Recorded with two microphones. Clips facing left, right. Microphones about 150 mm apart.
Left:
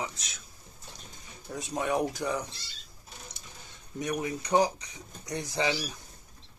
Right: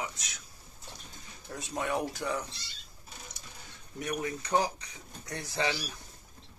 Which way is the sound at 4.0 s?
20° left (ahead or behind).